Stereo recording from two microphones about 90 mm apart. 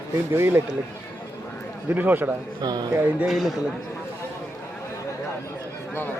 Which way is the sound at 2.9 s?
35° right (ahead or behind).